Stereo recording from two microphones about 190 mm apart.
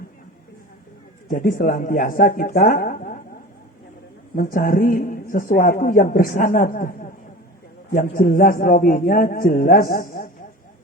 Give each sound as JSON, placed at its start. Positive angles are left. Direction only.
{"t": 1.3, "sound": "a man's voice", "side_deg": 45}
{"t": 4.4, "sound": "a man's voice", "side_deg": 50}
{"t": 8.1, "sound": "a man's voice", "side_deg": 45}